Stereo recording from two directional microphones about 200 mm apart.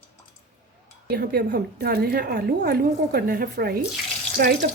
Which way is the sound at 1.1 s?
50° right (ahead or behind).